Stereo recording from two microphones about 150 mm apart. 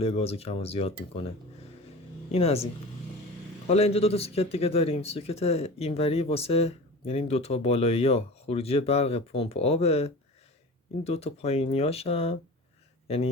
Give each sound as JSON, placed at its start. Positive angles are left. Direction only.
{"t": 0.0, "sound": "speech", "side_deg": 40}
{"t": 2.3, "sound": "speech", "side_deg": 40}
{"t": 3.7, "sound": "speech", "side_deg": 45}